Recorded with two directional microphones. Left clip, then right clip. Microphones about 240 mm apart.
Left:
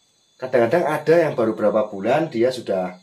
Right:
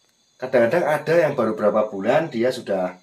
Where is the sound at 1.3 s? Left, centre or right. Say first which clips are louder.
Even; centre.